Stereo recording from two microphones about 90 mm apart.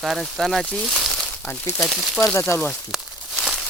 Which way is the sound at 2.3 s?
30° left (ahead or behind).